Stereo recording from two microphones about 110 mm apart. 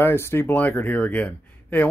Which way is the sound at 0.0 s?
20° left (ahead or behind).